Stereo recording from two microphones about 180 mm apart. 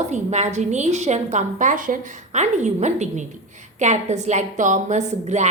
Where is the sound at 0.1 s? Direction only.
40° right (ahead or behind).